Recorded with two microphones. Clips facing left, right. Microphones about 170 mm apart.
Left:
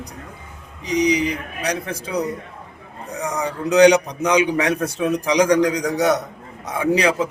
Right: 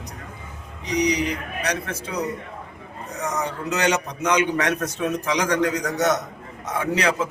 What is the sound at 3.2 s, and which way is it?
A man's voice, 10° left (ahead or behind).